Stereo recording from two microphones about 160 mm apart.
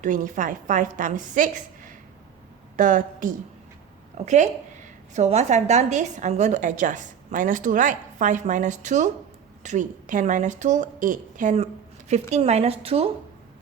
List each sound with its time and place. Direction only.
0.0 s a woman's voice: 55° right (ahead or behind); by 13.1 s 40° right (ahead or behind)